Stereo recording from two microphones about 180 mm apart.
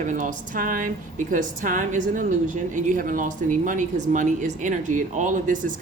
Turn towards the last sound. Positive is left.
turn(degrees=-45)  # may be behind; listen again after turning